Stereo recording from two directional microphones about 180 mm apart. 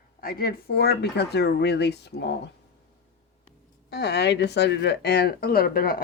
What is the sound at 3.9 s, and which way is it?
Speech, 65° left (ahead or behind).